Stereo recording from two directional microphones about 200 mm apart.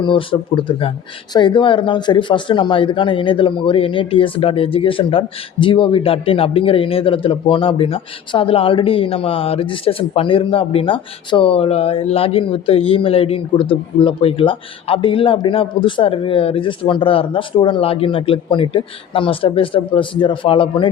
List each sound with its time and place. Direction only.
0.0 s speech: 25° left (ahead or behind)